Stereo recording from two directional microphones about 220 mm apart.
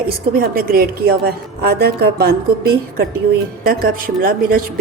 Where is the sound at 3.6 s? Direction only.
40° right (ahead or behind).